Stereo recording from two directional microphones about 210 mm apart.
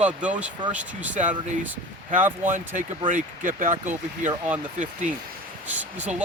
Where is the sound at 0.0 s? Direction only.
5° right (ahead or behind).